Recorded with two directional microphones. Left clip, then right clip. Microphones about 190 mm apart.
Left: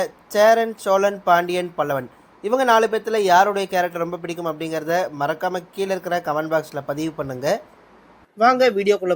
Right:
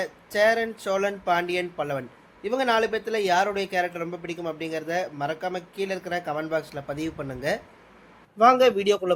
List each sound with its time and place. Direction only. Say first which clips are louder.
0.0 s a man's voice: left 6 dB; 20° left (ahead or behind)